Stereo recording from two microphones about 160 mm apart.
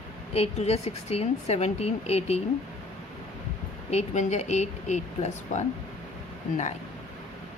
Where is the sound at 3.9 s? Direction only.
45° left (ahead or behind).